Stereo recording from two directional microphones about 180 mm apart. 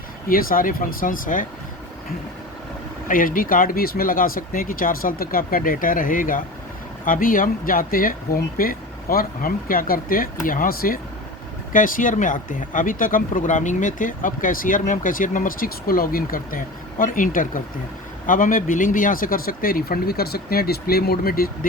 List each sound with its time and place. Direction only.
0.3 s speech: 55° left (ahead or behind)
3.1 s speech: 50° left (ahead or behind)